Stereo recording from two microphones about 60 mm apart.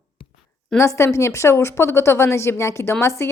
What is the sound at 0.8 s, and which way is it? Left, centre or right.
Speech, left.